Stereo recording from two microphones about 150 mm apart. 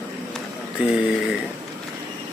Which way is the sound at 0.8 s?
5° right (ahead or behind).